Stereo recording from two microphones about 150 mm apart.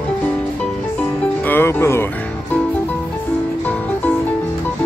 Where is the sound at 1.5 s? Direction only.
15° left (ahead or behind).